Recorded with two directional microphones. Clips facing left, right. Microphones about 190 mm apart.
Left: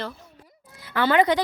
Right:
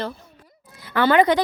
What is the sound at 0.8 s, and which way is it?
Speech, 55° right (ahead or behind).